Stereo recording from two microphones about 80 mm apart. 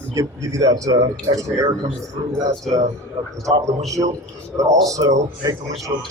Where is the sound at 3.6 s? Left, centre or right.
Right.